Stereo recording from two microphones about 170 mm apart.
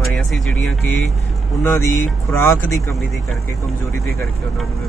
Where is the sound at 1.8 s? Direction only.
15° left (ahead or behind).